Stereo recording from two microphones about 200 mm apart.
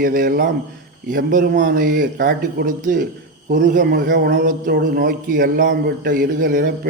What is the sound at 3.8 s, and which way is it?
Speech, 50° right (ahead or behind).